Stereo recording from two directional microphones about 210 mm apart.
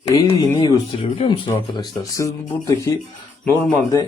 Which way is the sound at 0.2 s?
20° left (ahead or behind).